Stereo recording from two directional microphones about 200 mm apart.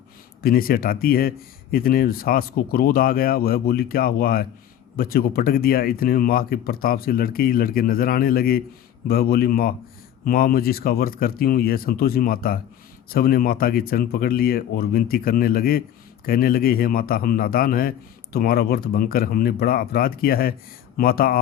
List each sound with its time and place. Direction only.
0.4 s a man's voice: 45° left (ahead or behind)